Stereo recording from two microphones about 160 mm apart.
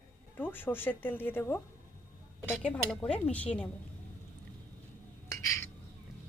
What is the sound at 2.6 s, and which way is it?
Speech, 5° left (ahead or behind).